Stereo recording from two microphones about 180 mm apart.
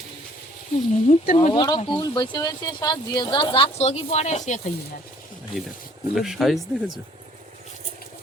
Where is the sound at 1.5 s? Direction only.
25° left (ahead or behind); by 4.6 s 40° left (ahead or behind).